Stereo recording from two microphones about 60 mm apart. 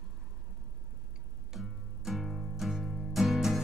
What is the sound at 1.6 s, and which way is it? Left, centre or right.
Music, centre.